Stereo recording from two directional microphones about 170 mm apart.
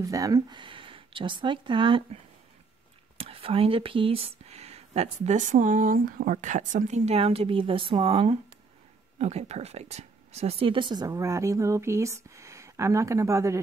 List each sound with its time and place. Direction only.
0.0 s speech: 20° right (ahead or behind)
3.2 s speech: 35° right (ahead or behind); by 13.6 s 15° right (ahead or behind)